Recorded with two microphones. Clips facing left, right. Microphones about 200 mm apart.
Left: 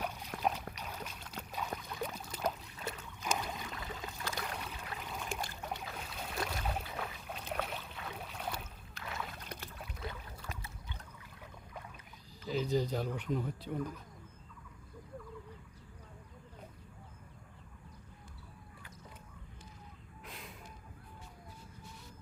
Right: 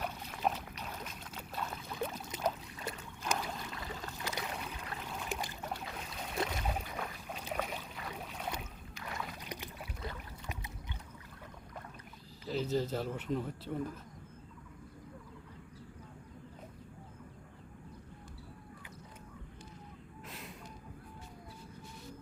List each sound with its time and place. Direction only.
0.0 s boat: 10° left (ahead or behind)
1.9 s boat: 5° right (ahead or behind)
4.2 s boat: 15° right (ahead or behind)
4.5 s boat: 5° right (ahead or behind)
9.4 s boat: 10° right (ahead or behind)
10.4 s boat: 20° right (ahead or behind)
12.5 s speech: centre (ahead or behind)
20.2 s a sound: centre (ahead or behind)